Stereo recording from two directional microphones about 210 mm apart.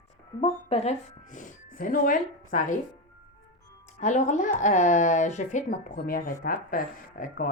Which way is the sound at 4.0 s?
35° left (ahead or behind).